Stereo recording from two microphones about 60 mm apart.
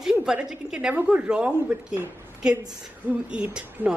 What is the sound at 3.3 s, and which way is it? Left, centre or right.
Speech, centre.